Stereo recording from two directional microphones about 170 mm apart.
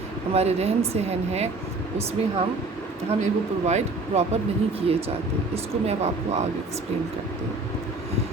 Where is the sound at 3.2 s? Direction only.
40° right (ahead or behind).